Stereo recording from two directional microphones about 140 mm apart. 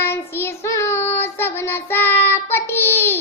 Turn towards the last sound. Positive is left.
turn(degrees=15)  # may be behind; listen again after turning